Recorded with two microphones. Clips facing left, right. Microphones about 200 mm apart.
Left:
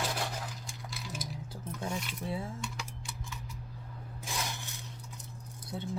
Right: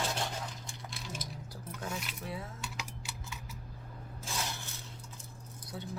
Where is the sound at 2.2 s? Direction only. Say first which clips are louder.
Left 4 dB; 25° left (ahead or behind).